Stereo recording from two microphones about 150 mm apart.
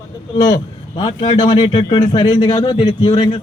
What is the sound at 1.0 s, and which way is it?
A man's voice, 30° left (ahead or behind).